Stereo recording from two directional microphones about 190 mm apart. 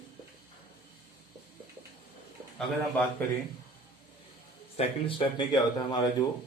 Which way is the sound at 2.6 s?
10° left (ahead or behind).